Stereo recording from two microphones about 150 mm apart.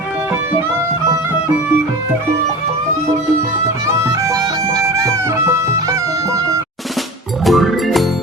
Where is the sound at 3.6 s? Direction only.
20° right (ahead or behind).